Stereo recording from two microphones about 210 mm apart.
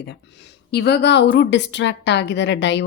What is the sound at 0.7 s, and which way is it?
Speech, 55° left (ahead or behind).